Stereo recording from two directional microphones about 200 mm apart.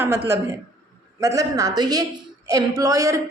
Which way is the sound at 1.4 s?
15° right (ahead or behind).